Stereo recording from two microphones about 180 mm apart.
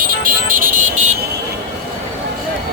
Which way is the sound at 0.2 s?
50° right (ahead or behind).